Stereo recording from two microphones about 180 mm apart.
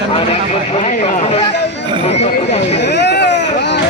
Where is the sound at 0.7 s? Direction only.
35° left (ahead or behind).